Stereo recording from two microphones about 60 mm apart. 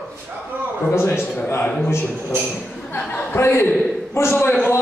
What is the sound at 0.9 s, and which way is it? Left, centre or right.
Speech, left.